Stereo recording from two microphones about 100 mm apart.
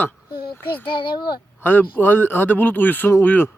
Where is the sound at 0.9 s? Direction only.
55° left (ahead or behind).